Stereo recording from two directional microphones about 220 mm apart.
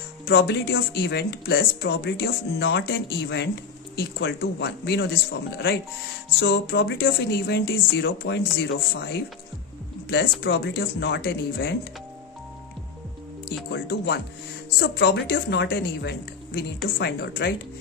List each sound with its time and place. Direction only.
0.3 s speech: 50° left (ahead or behind)
6.4 s speech: 45° left (ahead or behind)
10.4 s speech: 45° left (ahead or behind)
13.7 s speech: 50° left (ahead or behind)